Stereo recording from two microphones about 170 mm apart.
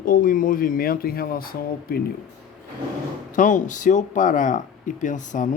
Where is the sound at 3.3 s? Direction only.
50° left (ahead or behind).